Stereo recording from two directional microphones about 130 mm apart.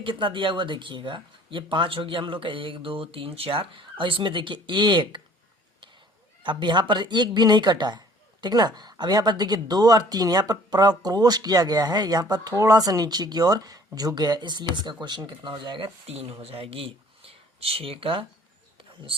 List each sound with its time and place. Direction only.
0.0 s speech: 40° right (ahead or behind)
6.4 s speech: 35° right (ahead or behind)
16.1 s speech: 50° right (ahead or behind)